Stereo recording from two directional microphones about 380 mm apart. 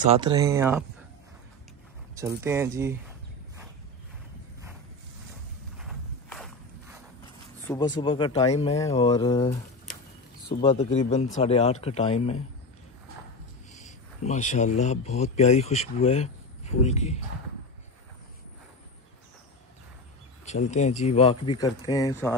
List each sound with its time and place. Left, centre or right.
0.0 s speech: centre
2.1 s speech: centre
5.8 s walk: centre
7.6 s speech: centre
13.7 s speech: centre
20.4 s speech: centre